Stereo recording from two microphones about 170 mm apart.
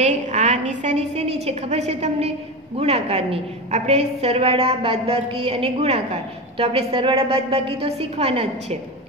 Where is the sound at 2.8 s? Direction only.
35° right (ahead or behind).